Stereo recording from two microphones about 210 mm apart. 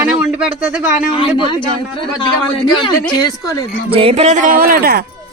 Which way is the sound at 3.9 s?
25° right (ahead or behind).